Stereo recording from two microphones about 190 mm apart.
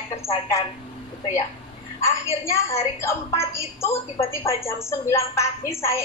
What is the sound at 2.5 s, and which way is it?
A woman's voice, 15° left (ahead or behind).